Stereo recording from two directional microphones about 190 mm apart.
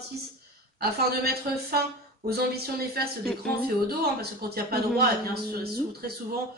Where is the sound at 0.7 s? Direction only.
55° right (ahead or behind).